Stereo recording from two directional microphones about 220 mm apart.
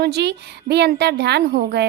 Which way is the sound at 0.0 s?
50° right (ahead or behind).